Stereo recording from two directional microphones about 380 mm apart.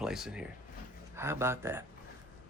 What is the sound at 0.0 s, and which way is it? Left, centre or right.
Speech, centre.